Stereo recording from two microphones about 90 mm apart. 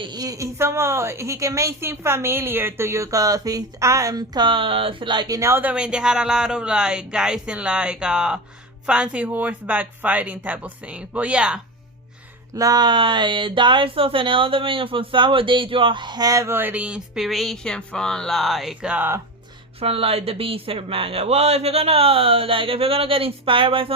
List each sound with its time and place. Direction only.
0.0 s a woman's voice: 50° right (ahead or behind)
5.4 s speech: 25° right (ahead or behind)
5.7 s speech: 10° right (ahead or behind)
12.5 s speech: 45° right (ahead or behind)
12.9 s speech: 65° right (ahead or behind); by 16.6 s 35° right (ahead or behind)
16.6 s speech: 20° right (ahead or behind)
17.2 s speech: centre (ahead or behind)
19.8 s speech: 90° right